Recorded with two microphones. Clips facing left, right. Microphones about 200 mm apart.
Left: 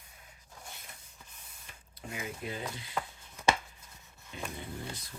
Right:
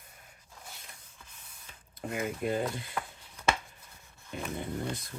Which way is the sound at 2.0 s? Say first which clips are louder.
Right 7 dB; 55° right (ahead or behind).